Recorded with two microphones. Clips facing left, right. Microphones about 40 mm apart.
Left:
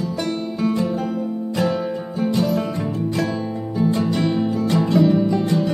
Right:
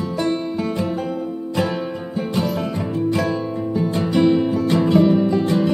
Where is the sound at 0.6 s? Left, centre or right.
Centre.